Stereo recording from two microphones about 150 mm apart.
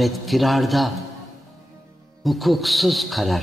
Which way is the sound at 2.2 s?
Centre (ahead or behind).